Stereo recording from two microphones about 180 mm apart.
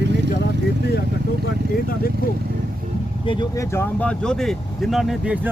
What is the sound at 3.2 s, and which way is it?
Speech, 20° left (ahead or behind).